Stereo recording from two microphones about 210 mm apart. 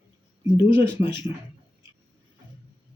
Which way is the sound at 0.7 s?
10° right (ahead or behind).